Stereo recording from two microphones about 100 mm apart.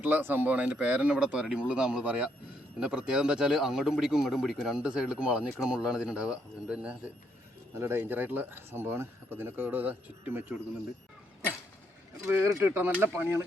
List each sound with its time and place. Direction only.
0.0 s speech: 20° right (ahead or behind)
7.8 s speech: 25° right (ahead or behind)
12.2 s speech: 25° right (ahead or behind)